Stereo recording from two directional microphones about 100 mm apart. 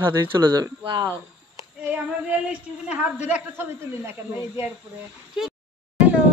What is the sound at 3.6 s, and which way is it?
Speech, 25° right (ahead or behind).